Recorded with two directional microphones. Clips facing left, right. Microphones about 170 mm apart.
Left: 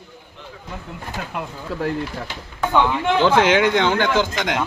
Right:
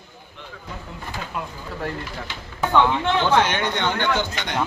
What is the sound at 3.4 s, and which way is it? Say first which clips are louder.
Speech: left 7 dB; 90° left.